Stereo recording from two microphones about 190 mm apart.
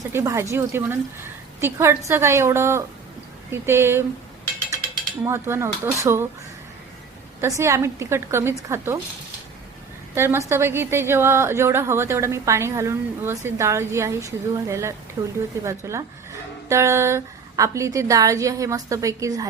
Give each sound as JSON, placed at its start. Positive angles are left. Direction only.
{"t": 0.1, "sound": "a woman's voice", "side_deg": -15}
{"t": 5.2, "sound": "a woman's voice", "side_deg": -15}
{"t": 7.4, "sound": "a woman's voice", "side_deg": -15}
{"t": 10.2, "sound": "a woman's voice", "side_deg": -15}